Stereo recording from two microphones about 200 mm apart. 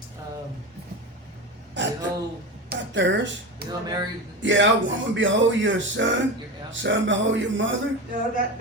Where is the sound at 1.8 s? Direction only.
65° right (ahead or behind).